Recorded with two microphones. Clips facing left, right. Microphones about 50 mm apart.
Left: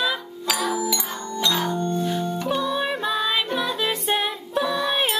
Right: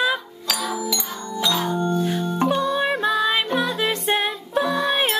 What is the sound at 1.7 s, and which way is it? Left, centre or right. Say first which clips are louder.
Music: right 2 dB; centre.